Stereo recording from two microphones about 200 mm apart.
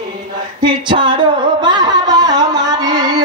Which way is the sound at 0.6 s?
25° right (ahead or behind).